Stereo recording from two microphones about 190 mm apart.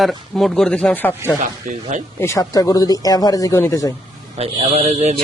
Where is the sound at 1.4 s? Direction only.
40° right (ahead or behind).